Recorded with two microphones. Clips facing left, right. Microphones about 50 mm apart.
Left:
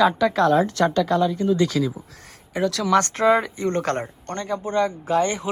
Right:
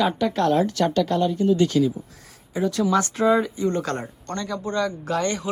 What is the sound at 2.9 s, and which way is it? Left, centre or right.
Speech, left.